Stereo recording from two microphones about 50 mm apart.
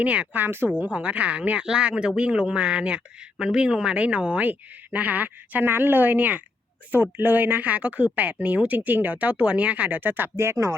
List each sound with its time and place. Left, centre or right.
0.0 s speech: right
0.3 s speech: right
0.8 s speech: right
10.3 s speech: right